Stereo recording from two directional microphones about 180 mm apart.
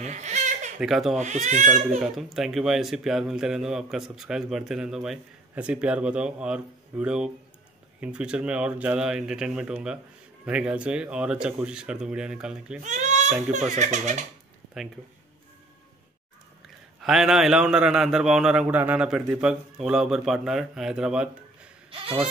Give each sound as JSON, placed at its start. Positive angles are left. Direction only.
{"t": 0.0, "sound": "baby laughter", "side_deg": -40}
{"t": 0.7, "sound": "speech", "side_deg": 0}
{"t": 1.1, "sound": "speech", "side_deg": -40}
{"t": 2.0, "sound": "speech", "side_deg": 0}
{"t": 12.8, "sound": "speech", "side_deg": -40}
{"t": 16.6, "sound": "speech", "side_deg": 0}
{"t": 21.9, "sound": "speech", "side_deg": -30}